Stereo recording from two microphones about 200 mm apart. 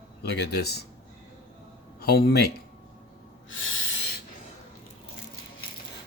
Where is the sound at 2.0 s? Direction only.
50° left (ahead or behind).